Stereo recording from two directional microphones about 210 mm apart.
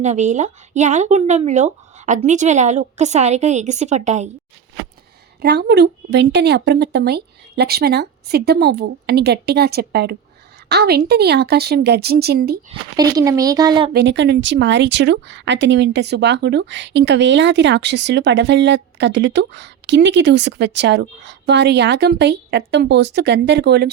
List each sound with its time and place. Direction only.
0.0 s speech: 35° right (ahead or behind)
5.4 s a woman's voice: 50° right (ahead or behind)
13.0 s speech: 15° right (ahead or behind)
13.9 s speech: 55° right (ahead or behind)